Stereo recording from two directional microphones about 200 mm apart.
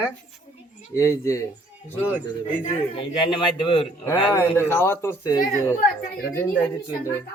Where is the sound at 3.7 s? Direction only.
15° left (ahead or behind).